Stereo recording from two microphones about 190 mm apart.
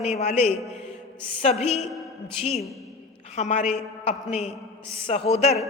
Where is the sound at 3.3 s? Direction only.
40° left (ahead or behind).